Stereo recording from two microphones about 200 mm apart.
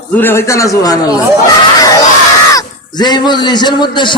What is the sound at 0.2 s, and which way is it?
Speech, 10° left (ahead or behind).